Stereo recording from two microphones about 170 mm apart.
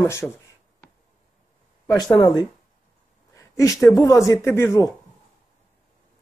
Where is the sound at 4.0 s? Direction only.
20° left (ahead or behind).